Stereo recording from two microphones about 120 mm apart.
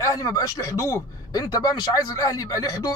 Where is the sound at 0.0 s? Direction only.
30° left (ahead or behind).